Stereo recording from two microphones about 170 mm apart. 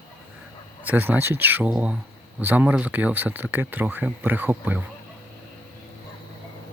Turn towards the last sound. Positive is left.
turn(degrees=-10)  # may be behind; listen again after turning